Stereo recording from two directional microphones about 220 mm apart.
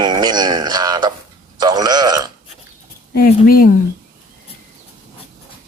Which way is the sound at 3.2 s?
40° left (ahead or behind).